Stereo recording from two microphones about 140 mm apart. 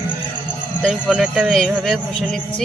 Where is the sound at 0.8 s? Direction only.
Centre (ahead or behind).